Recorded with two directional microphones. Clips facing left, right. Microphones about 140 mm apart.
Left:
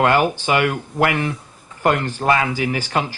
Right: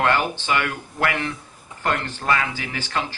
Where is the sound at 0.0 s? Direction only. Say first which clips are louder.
Left 5 dB; 15° left (ahead or behind).